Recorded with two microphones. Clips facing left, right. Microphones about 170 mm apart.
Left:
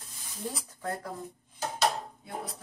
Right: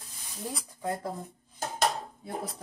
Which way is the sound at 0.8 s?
15° right (ahead or behind).